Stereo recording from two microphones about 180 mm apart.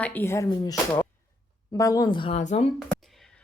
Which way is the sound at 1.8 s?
20° left (ahead or behind).